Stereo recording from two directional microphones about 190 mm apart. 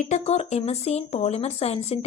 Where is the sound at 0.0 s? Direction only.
35° left (ahead or behind).